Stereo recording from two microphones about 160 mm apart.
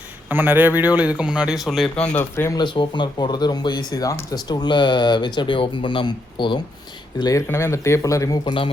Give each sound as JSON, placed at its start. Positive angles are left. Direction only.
{"t": 0.3, "sound": "a man's voice", "side_deg": -10}
{"t": 2.1, "sound": "speech", "side_deg": 15}
{"t": 2.6, "sound": "speech", "side_deg": 30}